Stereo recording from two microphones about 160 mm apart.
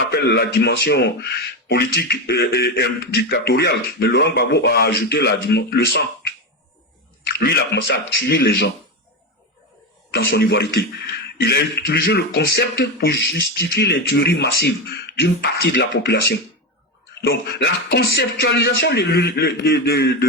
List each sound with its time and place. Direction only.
0.1 s speech: 90° left
7.3 s speech: 90° left
10.1 s speech: 80° left
11.3 s speech: 90° left